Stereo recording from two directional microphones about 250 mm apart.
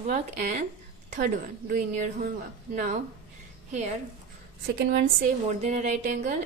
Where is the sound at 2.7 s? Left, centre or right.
Right.